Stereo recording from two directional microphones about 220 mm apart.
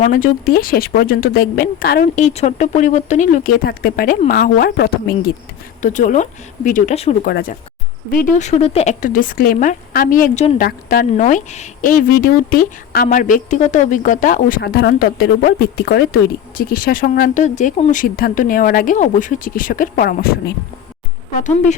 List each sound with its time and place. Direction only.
0.0 s speech: 40° left (ahead or behind)
7.3 s speech: 45° left (ahead or behind)